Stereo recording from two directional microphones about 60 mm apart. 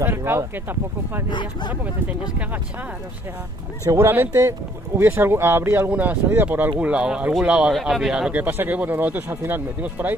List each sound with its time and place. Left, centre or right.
0.0 s speech: right
3.8 s speech: right
4.1 s speech: right
4.4 s speech: right
5.0 s speech: right
5.9 s speech: right
6.9 s speech: centre
7.8 s speech: centre
8.3 s speech: right
9.3 s speech: right
9.8 s speech: right